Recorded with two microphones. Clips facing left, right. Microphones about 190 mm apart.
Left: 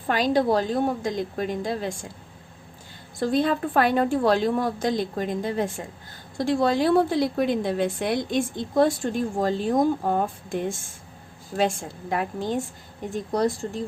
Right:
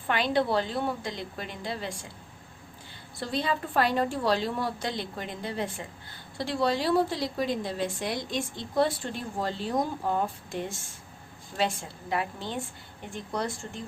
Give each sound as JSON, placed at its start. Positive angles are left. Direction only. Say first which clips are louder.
{"t": 0.1, "sound": "a woman's voice", "louder": "left 5 dB", "side_deg": 40}
{"t": 3.2, "sound": "a woman's voice", "louder": "left 8 dB", "side_deg": 50}